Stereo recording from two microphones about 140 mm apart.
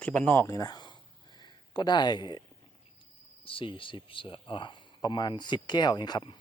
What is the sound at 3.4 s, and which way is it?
Speech, 40° left (ahead or behind).